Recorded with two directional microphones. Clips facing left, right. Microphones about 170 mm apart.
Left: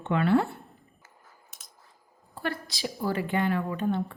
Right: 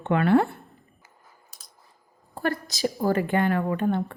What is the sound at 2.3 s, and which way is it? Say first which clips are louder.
Speech: right 5 dB; 45° right (ahead or behind).